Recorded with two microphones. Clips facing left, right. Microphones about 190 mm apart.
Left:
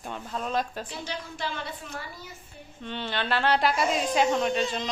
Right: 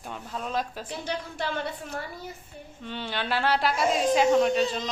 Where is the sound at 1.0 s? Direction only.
55° right (ahead or behind).